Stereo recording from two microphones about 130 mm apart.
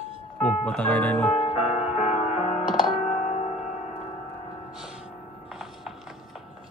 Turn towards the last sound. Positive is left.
turn(degrees=0)  # may be behind; listen again after turning